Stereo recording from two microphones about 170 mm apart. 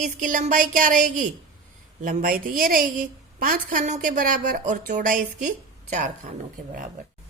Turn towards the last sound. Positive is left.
turn(degrees=-45)  # may be behind; listen again after turning